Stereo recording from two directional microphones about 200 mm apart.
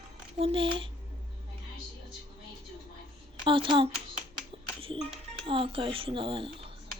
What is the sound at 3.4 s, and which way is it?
Speech, 25° right (ahead or behind).